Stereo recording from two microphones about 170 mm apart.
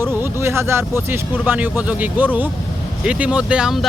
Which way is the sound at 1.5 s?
10° right (ahead or behind).